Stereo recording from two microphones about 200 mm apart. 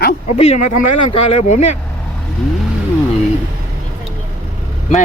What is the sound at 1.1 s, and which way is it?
Speech, 30° left (ahead or behind).